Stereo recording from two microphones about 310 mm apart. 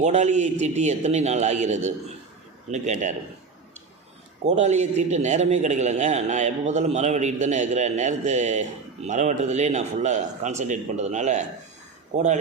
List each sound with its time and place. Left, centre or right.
0.0 s a man's voice: right
4.4 s a man's voice: right